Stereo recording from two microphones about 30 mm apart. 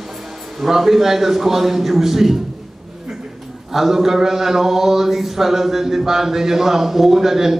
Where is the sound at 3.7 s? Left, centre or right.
Centre.